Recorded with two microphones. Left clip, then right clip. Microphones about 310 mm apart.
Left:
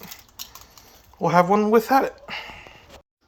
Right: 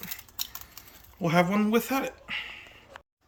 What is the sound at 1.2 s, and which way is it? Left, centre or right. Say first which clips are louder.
Speech: left 8 dB; centre.